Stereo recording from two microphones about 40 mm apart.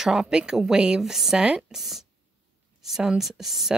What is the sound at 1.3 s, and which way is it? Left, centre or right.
Speech, right.